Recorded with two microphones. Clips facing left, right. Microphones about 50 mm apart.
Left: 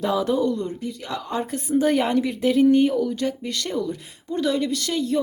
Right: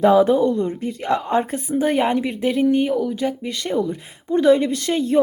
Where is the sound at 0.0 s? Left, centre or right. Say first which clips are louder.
Right 7 dB; right.